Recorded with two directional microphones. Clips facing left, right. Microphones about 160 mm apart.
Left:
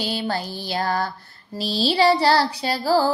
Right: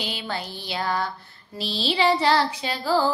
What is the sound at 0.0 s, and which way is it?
Mantra, 40° left (ahead or behind).